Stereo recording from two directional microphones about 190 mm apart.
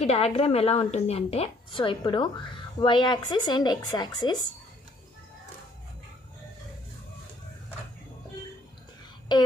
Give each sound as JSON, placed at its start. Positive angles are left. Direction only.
{"t": 0.0, "sound": "a woman's voice", "side_deg": 30}